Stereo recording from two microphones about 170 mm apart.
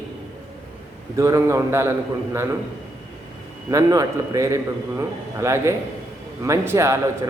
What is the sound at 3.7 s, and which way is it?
A man's voice, 20° right (ahead or behind).